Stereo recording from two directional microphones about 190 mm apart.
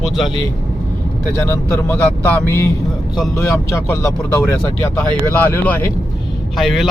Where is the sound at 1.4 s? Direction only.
10° left (ahead or behind).